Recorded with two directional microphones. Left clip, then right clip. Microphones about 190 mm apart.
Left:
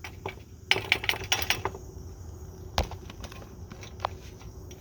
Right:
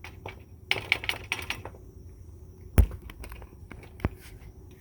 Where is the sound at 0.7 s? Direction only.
60° left (ahead or behind).